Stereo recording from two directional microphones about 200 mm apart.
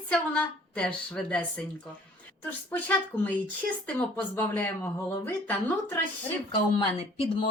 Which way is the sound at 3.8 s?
10° left (ahead or behind).